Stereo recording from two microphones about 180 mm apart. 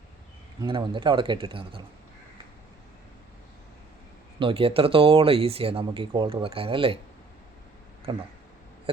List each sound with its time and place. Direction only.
0.6 s speech: 25° right (ahead or behind)
4.4 s speech: 30° right (ahead or behind)
8.1 s speech: 30° right (ahead or behind)